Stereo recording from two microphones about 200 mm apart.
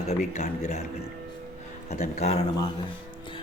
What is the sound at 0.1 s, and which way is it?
Speech, 35° left (ahead or behind).